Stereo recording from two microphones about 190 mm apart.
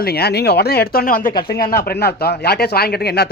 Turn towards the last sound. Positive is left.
turn(degrees=55)  # may be behind; listen again after turning